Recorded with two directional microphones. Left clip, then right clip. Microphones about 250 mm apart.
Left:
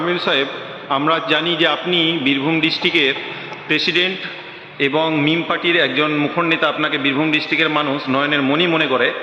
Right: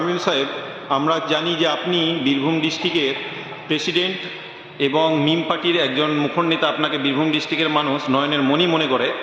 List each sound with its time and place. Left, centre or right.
0.1 s a man's voice: centre